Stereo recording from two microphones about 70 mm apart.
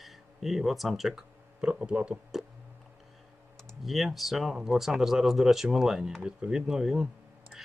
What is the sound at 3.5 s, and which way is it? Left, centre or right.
Speech, centre.